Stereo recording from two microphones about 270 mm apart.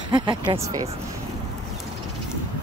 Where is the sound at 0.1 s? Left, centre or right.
Centre.